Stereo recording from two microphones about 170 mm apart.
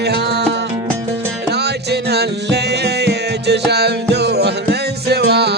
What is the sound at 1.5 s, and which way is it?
Music, 75° right (ahead or behind).